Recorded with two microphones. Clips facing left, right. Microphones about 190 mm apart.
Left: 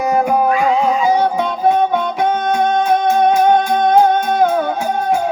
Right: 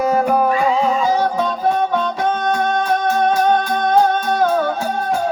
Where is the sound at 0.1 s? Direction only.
15° left (ahead or behind).